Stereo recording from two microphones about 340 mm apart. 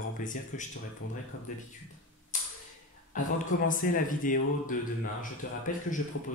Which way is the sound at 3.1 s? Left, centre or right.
Left.